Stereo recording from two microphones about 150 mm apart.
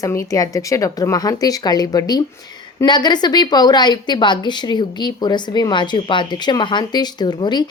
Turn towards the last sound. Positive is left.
turn(degrees=30)  # may be behind; listen again after turning